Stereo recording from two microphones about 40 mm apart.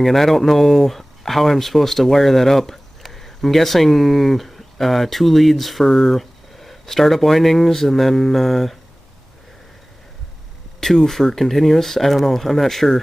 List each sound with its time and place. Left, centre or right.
0.0 s speech: centre
10.8 s speech: centre